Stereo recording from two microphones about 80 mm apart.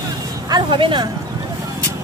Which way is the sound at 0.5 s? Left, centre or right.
Right.